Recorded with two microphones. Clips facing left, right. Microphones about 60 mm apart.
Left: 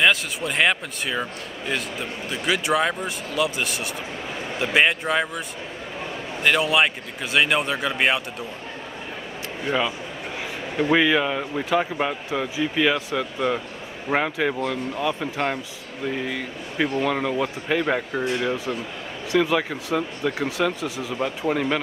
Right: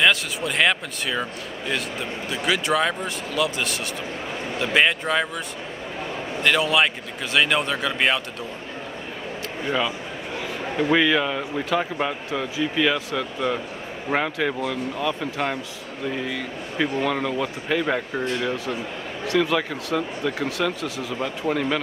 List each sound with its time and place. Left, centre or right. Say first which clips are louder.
0.0 s speech: even; centre
6.4 s speech: even; centre
9.7 s speech: left 1 dB; centre